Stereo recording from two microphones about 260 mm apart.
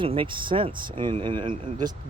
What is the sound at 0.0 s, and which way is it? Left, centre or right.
Speech, centre.